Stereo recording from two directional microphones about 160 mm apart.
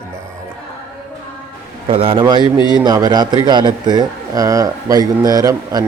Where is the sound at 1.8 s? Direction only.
35° right (ahead or behind).